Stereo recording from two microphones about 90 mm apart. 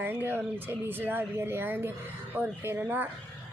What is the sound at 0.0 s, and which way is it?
Speech, 25° right (ahead or behind).